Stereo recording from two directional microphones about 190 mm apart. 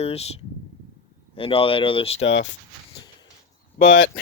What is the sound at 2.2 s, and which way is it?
Speech, 75° left (ahead or behind).